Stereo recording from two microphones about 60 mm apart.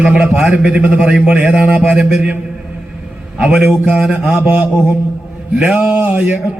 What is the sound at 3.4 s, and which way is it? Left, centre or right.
Speech, centre.